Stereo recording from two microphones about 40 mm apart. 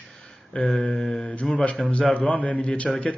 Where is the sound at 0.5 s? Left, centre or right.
Left.